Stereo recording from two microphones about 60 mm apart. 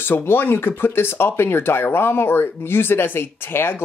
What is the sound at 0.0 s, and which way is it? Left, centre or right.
Speech, left.